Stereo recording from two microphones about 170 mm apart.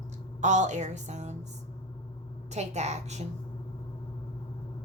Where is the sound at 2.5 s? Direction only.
40° right (ahead or behind).